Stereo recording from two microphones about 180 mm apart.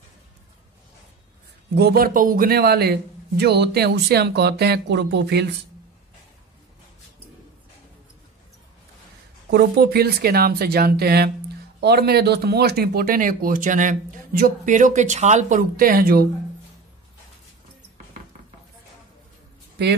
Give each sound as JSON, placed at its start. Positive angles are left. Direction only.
{"t": 1.8, "sound": "speech", "side_deg": -60}
{"t": 9.5, "sound": "speech", "side_deg": -60}